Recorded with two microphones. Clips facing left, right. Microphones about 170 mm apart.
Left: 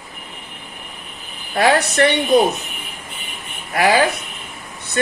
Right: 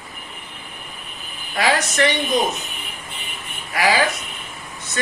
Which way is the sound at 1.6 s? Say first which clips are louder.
Left 4 dB; 60° left (ahead or behind).